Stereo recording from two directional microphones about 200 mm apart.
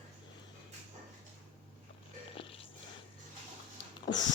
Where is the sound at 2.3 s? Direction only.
30° left (ahead or behind).